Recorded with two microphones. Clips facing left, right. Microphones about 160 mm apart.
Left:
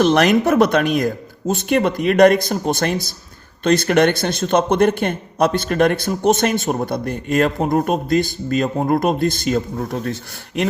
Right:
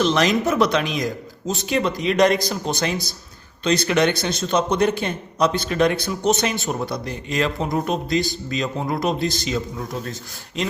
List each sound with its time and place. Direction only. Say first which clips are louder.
0.0 s speech: left 5 dB; 60° left (ahead or behind)